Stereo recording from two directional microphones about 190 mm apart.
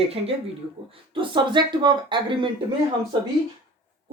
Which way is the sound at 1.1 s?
25° right (ahead or behind).